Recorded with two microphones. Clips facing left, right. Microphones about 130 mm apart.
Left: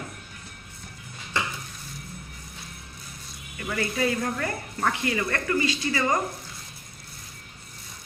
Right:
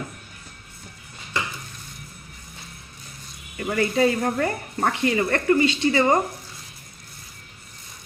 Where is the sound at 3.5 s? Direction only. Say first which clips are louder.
Right 7 dB; 35° right (ahead or behind).